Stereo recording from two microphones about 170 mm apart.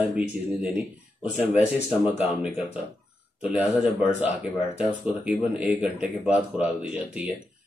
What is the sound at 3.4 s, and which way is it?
Speech, 5° right (ahead or behind).